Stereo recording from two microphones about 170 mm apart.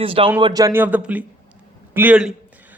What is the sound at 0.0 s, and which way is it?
A man's voice, 30° right (ahead or behind).